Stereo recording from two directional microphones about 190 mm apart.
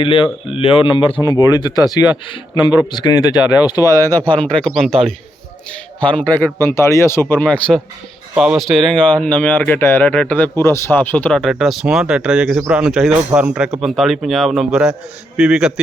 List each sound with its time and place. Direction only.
0.0 s speech: 30° left (ahead or behind); by 4.9 s 5° left (ahead or behind)
4.9 s a man's voice: 30° right (ahead or behind)
5.7 s speech: 5° left (ahead or behind)